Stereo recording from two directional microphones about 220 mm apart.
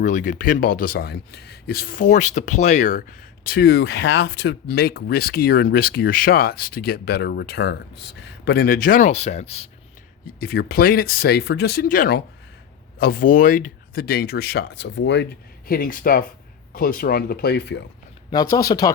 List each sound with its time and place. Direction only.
0.0 s speech: 35° left (ahead or behind)
3.4 s speech: 45° left (ahead or behind); by 9.6 s 30° left (ahead or behind)
10.4 s speech: 45° left (ahead or behind)
18.3 s speech: 15° left (ahead or behind)